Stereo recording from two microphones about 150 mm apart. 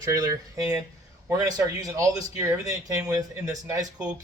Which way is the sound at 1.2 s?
25° right (ahead or behind).